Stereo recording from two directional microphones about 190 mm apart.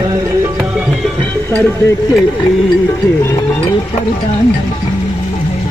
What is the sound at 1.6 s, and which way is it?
Speech, 15° left (ahead or behind).